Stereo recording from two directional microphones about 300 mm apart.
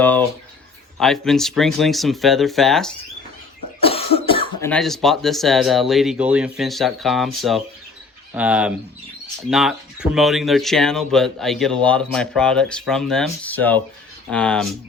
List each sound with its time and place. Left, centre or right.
0.0 s speech: centre
3.8 s cough: centre
4.7 s speech: centre